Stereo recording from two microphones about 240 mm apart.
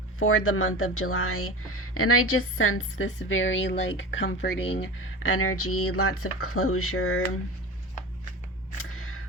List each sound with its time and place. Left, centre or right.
0.2 s a woman's voice: left
5.3 s a woman's voice: left
8.8 s single-lens reflex camera: left